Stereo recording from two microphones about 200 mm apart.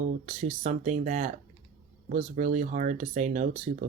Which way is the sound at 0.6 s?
40° right (ahead or behind).